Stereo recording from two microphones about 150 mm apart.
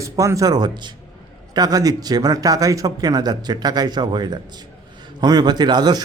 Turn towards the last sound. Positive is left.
turn(degrees=-30)  # may be behind; listen again after turning